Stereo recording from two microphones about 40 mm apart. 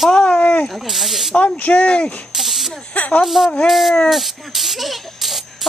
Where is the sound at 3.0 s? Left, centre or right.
Left.